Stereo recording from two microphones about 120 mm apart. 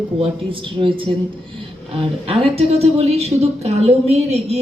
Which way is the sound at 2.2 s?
55° right (ahead or behind).